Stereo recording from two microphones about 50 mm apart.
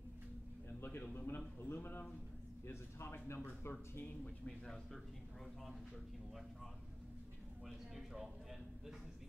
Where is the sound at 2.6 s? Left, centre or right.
Left.